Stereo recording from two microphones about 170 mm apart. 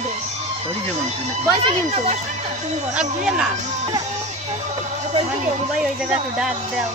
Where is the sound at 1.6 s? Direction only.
40° right (ahead or behind).